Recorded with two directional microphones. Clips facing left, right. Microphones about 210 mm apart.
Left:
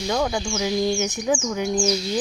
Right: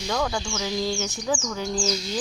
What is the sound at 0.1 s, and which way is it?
Speech, 20° left (ahead or behind).